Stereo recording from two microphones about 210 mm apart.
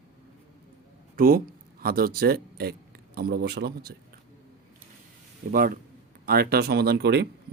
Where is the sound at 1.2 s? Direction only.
45° right (ahead or behind).